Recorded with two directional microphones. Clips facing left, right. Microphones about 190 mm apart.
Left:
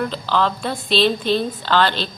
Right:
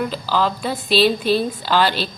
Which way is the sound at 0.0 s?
5° right (ahead or behind).